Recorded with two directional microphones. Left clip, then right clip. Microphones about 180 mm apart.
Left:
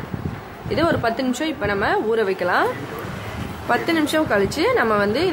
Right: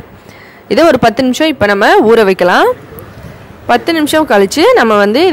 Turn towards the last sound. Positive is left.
turn(degrees=-45)  # may be behind; listen again after turning